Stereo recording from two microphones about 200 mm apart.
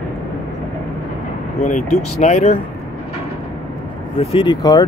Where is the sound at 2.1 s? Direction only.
35° left (ahead or behind).